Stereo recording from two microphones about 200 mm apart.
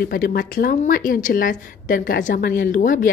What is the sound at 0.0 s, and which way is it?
A woman's voice, 45° left (ahead or behind).